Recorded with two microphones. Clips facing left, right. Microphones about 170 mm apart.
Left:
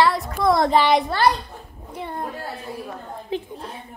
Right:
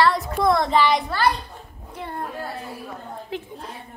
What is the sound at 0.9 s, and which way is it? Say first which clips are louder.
Speech: left 3 dB; 30° left (ahead or behind).